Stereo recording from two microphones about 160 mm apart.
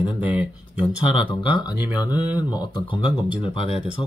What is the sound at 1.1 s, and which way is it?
Speech, 30° left (ahead or behind).